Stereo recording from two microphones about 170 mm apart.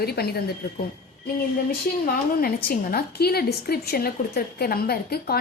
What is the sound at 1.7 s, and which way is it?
A woman's voice, 60° left (ahead or behind).